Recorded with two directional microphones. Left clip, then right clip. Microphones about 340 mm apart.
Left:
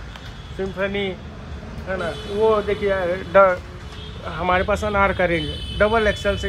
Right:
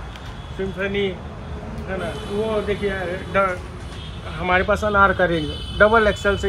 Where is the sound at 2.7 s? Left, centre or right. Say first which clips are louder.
Left 3 dB; centre.